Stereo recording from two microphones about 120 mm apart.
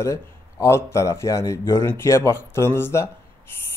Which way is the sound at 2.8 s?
20° left (ahead or behind).